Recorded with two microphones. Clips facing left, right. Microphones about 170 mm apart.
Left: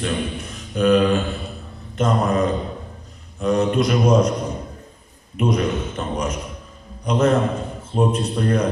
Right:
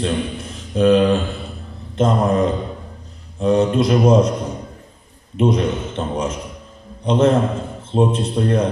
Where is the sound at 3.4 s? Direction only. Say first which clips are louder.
Right 3 dB; 30° right (ahead or behind).